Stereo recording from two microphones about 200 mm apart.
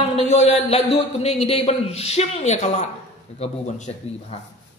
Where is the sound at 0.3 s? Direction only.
35° left (ahead or behind).